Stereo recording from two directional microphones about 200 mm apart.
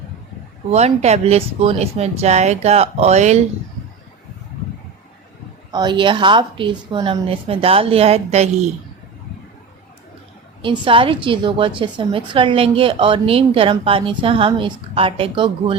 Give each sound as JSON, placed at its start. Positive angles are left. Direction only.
{"t": 0.7, "sound": "speech", "side_deg": -35}
{"t": 5.7, "sound": "a woman's voice", "side_deg": -20}
{"t": 10.6, "sound": "a woman's voice", "side_deg": -25}